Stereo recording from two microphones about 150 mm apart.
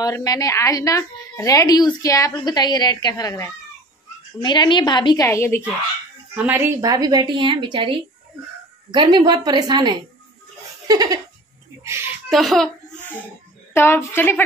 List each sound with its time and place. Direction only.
0.0 s a woman's voice: 25° left (ahead or behind)
6.3 s a woman's voice: 10° right (ahead or behind)
6.8 s a woman's voice: 25° right (ahead or behind)
10.9 s giggle: 25° right (ahead or behind)
12.3 s a sound: centre (ahead or behind)
13.7 s a woman's voice: 15° left (ahead or behind)